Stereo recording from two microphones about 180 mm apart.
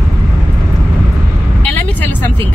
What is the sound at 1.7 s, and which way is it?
Speech, 10° left (ahead or behind).